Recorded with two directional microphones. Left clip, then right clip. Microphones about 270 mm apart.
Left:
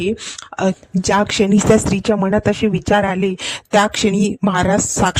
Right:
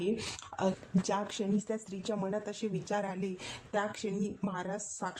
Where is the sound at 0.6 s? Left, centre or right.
Left.